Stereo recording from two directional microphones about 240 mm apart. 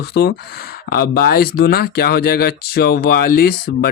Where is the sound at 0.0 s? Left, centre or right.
Left.